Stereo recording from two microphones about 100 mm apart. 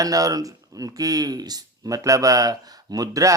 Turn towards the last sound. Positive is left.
turn(degrees=-35)  # may be behind; listen again after turning